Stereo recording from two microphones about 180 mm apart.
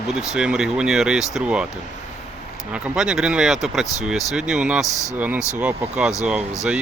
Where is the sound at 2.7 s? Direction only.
5° right (ahead or behind).